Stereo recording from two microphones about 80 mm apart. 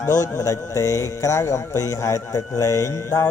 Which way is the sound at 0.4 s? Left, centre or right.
Left.